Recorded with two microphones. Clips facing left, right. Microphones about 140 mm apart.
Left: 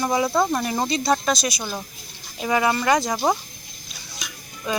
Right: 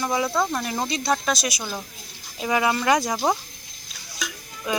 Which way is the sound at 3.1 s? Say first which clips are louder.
Left 1 dB; 5° left (ahead or behind).